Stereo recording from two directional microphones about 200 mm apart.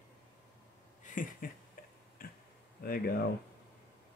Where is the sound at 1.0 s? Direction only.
40° left (ahead or behind).